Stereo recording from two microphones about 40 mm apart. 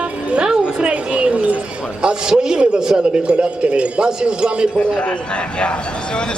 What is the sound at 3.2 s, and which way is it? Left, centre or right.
A woman's voice, right.